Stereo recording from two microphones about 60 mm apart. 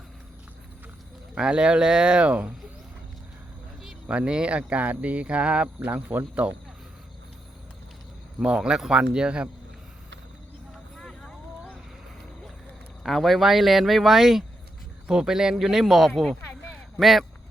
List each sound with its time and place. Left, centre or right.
1.4 s speech: centre
4.0 s speech: centre
8.4 s speech: centre
10.9 s vehicle: centre
13.0 s speech: centre